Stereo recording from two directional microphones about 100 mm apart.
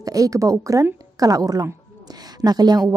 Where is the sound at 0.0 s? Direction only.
35° right (ahead or behind).